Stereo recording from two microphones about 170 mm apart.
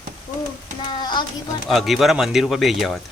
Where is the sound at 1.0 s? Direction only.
25° left (ahead or behind).